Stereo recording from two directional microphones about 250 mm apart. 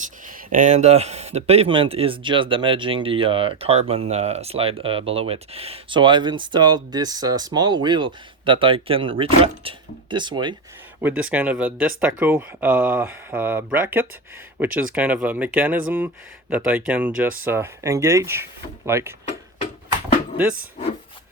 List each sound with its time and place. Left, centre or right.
0.3 s speech: right
11.0 s speech: centre
20.3 s speech: centre